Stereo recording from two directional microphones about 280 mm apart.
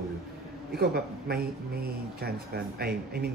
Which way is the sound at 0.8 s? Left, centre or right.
Right.